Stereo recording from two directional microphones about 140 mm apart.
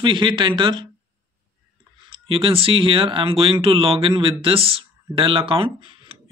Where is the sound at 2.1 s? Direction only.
40° right (ahead or behind).